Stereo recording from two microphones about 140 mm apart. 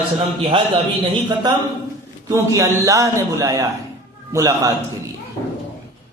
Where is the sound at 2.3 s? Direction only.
25° right (ahead or behind).